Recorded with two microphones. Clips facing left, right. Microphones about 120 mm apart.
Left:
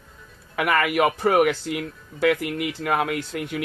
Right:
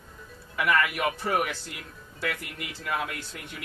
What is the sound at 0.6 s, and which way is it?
Speech, 70° left (ahead or behind).